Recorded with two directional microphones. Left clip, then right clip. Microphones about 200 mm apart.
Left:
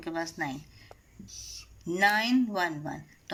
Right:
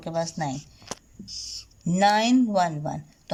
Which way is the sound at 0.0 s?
40° right (ahead or behind).